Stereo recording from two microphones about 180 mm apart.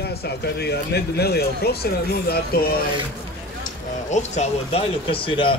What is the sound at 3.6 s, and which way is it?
Speech, 40° left (ahead or behind).